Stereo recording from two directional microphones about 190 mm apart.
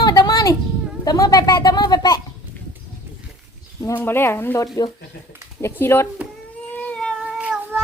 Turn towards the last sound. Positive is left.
turn(degrees=-5)  # may be behind; listen again after turning